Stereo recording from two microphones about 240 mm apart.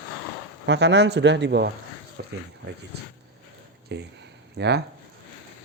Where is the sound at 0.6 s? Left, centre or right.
Right.